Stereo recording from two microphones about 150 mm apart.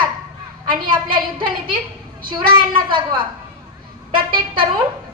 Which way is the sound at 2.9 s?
30° right (ahead or behind).